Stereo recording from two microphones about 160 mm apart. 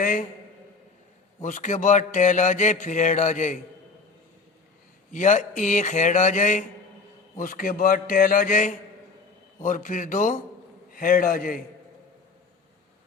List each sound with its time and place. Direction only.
0.0 s a man's voice: 55° left (ahead or behind)
1.4 s mantra: 50° left (ahead or behind)
5.1 s mantra: 50° left (ahead or behind)
7.3 s a man's voice: 55° left (ahead or behind)
9.6 s mantra: 55° left (ahead or behind)
10.9 s a man's voice: 60° left (ahead or behind)